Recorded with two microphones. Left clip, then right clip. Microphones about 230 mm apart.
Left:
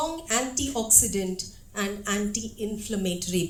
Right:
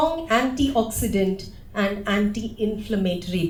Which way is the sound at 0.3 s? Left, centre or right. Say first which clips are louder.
Right 7 dB; left.